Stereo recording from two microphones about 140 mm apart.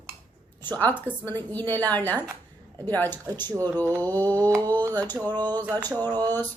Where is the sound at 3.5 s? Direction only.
25° right (ahead or behind).